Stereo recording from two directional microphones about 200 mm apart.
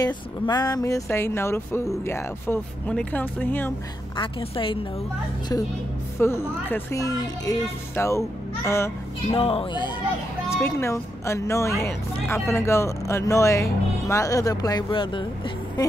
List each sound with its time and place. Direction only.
0.0 s speech: 20° left (ahead or behind)
4.2 s speech: 25° left (ahead or behind)
6.1 s speech: 10° left (ahead or behind)
9.3 s speech: 30° left (ahead or behind)